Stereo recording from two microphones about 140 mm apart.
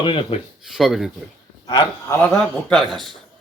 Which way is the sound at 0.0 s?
35° left (ahead or behind).